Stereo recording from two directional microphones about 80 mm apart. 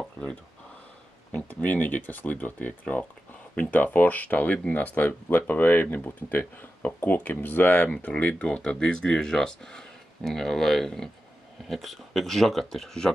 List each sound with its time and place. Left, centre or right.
1.3 s speech: centre